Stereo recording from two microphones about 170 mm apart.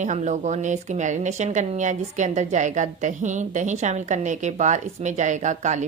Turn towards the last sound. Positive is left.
turn(degrees=-45)  # may be behind; listen again after turning